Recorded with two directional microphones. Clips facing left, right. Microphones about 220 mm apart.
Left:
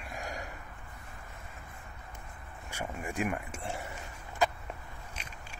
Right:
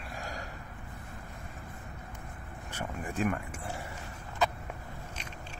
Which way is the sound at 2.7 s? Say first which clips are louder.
Even; 10° left (ahead or behind).